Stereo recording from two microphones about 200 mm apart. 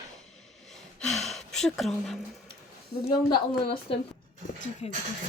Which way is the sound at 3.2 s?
25° left (ahead or behind).